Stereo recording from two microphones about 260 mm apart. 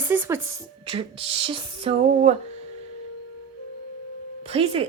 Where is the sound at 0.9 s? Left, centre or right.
Right.